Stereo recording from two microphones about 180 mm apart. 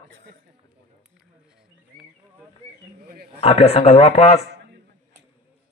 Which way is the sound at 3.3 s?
30° left (ahead or behind).